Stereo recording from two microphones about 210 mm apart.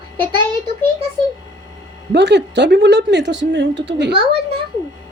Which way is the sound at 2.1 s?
55° right (ahead or behind).